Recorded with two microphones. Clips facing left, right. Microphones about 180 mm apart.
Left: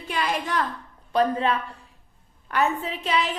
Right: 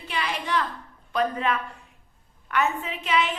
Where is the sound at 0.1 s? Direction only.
45° left (ahead or behind).